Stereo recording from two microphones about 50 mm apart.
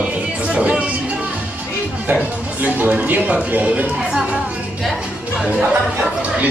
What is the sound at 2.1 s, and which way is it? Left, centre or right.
A man's voice, right.